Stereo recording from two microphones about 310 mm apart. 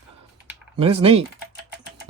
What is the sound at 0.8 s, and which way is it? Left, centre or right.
Speech, centre.